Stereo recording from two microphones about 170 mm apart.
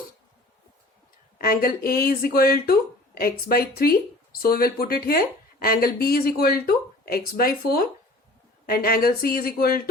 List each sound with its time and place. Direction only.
1.4 s speech: 60° left (ahead or behind)